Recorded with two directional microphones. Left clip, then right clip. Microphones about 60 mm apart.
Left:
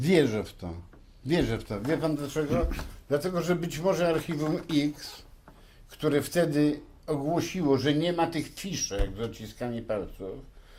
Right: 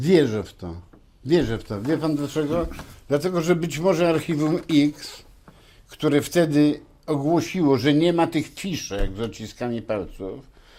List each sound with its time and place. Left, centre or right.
0.0 s speech: right